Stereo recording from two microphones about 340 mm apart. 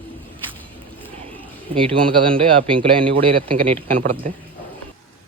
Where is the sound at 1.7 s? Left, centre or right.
Centre.